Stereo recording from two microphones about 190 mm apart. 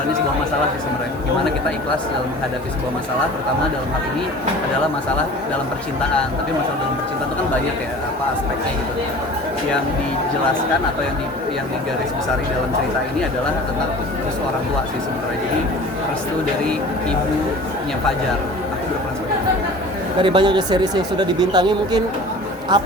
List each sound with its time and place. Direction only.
20.2 s speech: 25° right (ahead or behind)